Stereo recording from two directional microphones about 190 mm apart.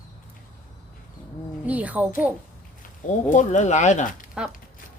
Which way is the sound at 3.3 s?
40° left (ahead or behind).